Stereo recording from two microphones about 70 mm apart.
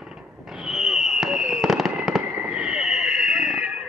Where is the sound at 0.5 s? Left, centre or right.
Centre.